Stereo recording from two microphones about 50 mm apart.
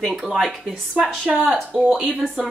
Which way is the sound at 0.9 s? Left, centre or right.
Right.